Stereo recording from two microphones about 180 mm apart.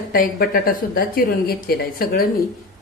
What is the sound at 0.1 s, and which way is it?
Speech, 55° left (ahead or behind).